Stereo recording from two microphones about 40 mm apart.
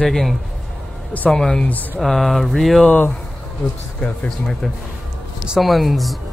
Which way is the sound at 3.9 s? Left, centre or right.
Left.